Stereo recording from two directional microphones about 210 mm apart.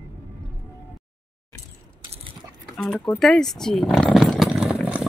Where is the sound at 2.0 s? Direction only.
25° right (ahead or behind).